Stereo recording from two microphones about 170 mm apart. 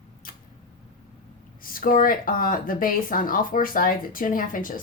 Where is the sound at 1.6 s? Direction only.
55° left (ahead or behind).